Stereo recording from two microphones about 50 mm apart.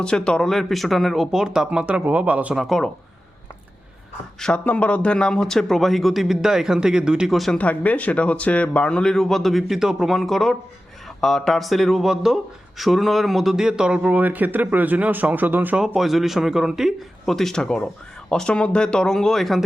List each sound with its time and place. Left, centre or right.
0.0 s speech: centre
1.3 s speech: centre
2.0 s a man's voice: right
2.6 s speech: centre
4.4 s speech: centre
4.6 s speech: left; by 7.3 s centre
7.3 s speech: centre
7.6 s a man's voice: left; by 15.7 s right
16.0 s speech: centre
17.2 s speech: centre